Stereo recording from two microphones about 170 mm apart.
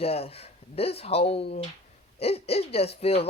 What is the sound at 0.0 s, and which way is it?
Speech, 35° left (ahead or behind).